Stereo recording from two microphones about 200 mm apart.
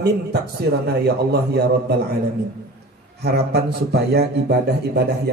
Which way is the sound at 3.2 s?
55° right (ahead or behind).